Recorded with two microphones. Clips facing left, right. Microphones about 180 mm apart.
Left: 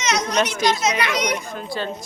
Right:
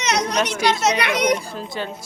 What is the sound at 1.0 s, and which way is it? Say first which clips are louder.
Speech: right 3 dB; 55° right (ahead or behind).